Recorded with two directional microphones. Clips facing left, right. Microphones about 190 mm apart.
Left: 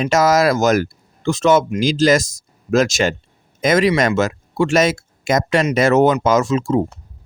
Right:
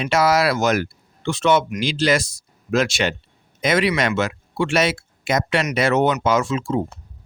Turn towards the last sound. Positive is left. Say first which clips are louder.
# left 4 dB
turn(degrees=40)  # may be behind; listen again after turning